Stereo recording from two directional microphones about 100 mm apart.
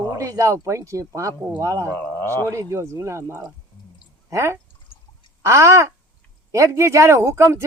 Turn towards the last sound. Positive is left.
turn(degrees=-25)  # may be behind; listen again after turning